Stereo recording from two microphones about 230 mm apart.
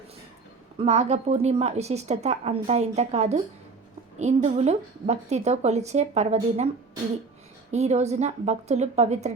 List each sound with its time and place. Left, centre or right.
0.8 s a woman's voice: right
7.7 s a woman's voice: right